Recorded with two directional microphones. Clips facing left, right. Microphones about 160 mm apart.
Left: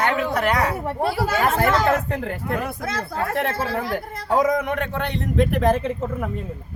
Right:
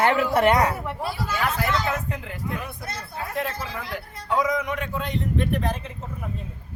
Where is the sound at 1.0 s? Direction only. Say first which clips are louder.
Left 7 dB; 65° left (ahead or behind).